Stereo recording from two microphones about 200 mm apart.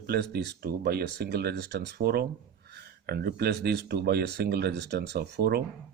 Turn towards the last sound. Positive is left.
turn(degrees=-55)  # may be behind; listen again after turning